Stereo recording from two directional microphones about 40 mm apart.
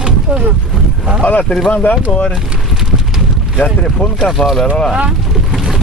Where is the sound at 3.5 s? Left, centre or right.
Left.